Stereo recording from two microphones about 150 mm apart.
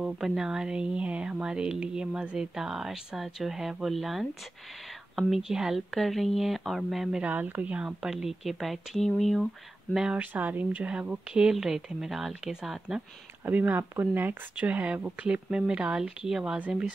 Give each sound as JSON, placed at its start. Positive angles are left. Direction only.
{"t": 0.0, "sound": "a woman's voice", "side_deg": -5}